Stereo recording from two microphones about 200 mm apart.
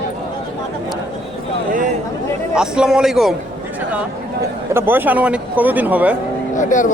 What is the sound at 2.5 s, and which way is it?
Speech, 5° right (ahead or behind).